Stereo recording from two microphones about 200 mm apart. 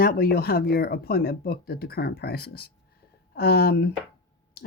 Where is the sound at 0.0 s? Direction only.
50° left (ahead or behind).